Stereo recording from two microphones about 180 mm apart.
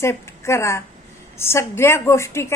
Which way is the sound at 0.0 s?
15° left (ahead or behind).